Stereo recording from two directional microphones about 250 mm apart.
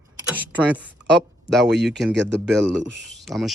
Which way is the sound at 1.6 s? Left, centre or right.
Right.